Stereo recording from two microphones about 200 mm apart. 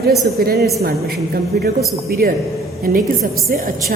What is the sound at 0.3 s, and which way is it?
A woman's voice, 50° right (ahead or behind).